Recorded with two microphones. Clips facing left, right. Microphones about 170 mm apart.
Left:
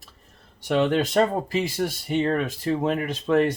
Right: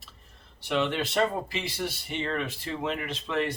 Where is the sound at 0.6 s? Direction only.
45° left (ahead or behind).